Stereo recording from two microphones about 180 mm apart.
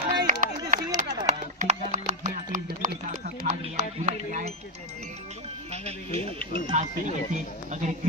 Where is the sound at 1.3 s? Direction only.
40° right (ahead or behind).